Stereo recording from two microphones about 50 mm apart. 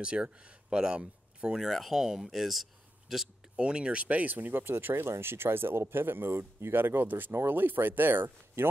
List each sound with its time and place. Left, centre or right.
0.0 s speech: right
1.6 s speech: centre
3.5 s speech: centre; by 8.6 s right